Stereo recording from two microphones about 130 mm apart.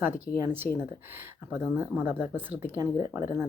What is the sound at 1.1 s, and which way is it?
Speech, 15° right (ahead or behind).